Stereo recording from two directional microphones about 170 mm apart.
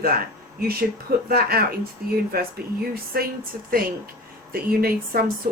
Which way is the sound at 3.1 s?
60° right (ahead or behind).